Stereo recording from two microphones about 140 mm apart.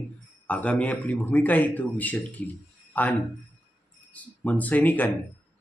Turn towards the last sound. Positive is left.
turn(degrees=10)  # may be behind; listen again after turning